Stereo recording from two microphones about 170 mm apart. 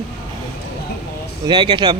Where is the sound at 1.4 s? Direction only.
25° right (ahead or behind).